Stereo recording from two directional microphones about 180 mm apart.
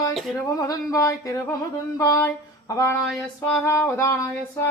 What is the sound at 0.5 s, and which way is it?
Female singing, 20° left (ahead or behind).